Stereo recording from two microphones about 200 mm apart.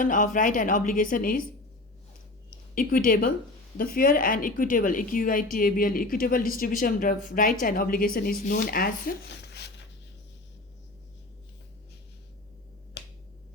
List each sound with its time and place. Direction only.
0.0 s a woman's voice: 40° left (ahead or behind)
2.7 s a woman's voice: 45° left (ahead or behind)